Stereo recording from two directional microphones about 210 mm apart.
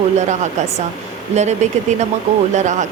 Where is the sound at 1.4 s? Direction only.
35° right (ahead or behind).